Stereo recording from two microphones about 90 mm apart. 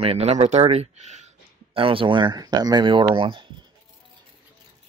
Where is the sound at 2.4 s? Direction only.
50° right (ahead or behind); by 3.5 s 65° right (ahead or behind).